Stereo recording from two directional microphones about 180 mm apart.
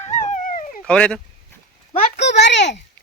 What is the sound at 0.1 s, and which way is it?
Dog, 45° left (ahead or behind).